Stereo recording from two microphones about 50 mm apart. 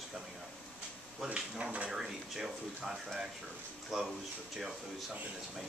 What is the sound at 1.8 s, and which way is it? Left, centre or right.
Speech, centre.